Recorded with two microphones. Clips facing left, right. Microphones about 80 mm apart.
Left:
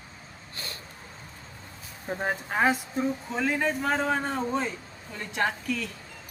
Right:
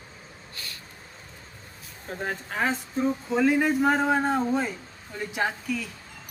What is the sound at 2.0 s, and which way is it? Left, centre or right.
Speech, centre.